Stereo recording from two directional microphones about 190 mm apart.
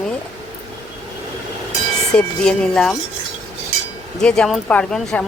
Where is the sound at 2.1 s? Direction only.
5° left (ahead or behind).